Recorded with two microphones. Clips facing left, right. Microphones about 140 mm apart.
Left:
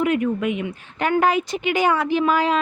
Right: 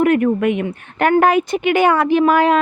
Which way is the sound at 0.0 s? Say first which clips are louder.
Right 6 dB; 60° right (ahead or behind).